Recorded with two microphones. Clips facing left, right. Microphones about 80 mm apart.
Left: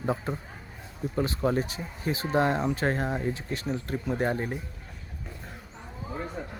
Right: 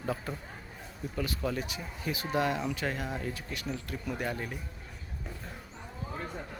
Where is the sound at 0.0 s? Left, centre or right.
Left.